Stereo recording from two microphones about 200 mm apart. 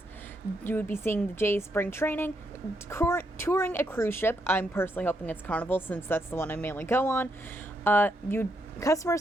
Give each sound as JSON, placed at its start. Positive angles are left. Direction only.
{"t": 0.7, "sound": "a woman's voice", "side_deg": 10}